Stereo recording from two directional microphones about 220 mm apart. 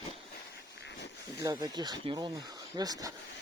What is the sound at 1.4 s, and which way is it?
Speech, 20° right (ahead or behind).